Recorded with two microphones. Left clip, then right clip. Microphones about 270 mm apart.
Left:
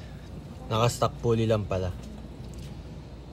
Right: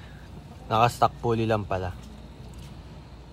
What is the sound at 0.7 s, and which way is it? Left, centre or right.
Speech, centre.